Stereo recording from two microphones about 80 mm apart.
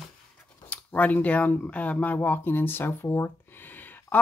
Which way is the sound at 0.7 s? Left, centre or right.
Centre.